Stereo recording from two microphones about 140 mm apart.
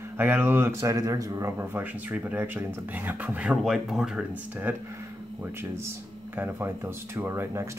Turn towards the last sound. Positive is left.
turn(degrees=-20)  # may be behind; listen again after turning